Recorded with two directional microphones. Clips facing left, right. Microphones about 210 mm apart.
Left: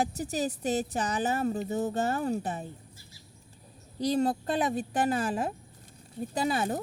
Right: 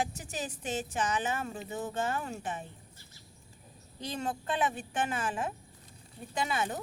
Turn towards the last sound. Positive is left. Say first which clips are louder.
# left 4 dB
turn(degrees=40)  # may be behind; listen again after turning